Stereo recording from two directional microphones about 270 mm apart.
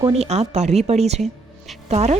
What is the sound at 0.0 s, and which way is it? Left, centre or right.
Speech, right.